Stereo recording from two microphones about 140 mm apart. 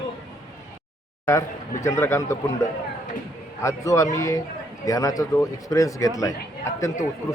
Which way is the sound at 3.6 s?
20° left (ahead or behind).